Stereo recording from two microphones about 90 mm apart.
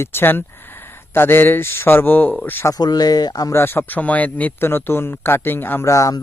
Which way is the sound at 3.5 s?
25° left (ahead or behind).